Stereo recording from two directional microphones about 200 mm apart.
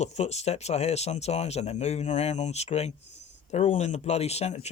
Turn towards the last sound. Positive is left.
turn(degrees=30)  # may be behind; listen again after turning